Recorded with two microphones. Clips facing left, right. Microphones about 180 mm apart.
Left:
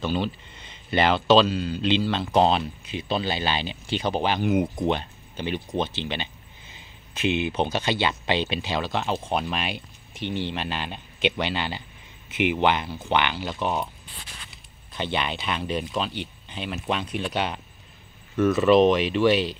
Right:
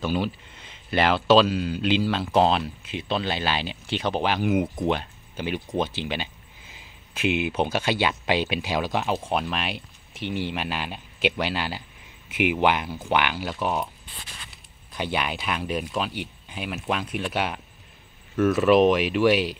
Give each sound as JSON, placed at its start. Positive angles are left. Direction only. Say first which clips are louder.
{"t": 0.0, "sound": "speech", "louder": "even", "side_deg": -5}
{"t": 15.0, "sound": "speech", "louder": "even", "side_deg": -5}